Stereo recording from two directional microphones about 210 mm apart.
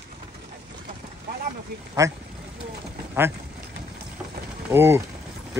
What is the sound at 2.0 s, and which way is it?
Speech, 15° right (ahead or behind).